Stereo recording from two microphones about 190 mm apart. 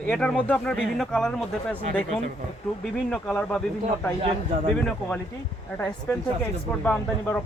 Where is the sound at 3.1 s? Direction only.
5° left (ahead or behind).